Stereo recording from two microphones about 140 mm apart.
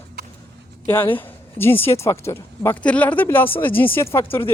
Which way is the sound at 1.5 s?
15° left (ahead or behind).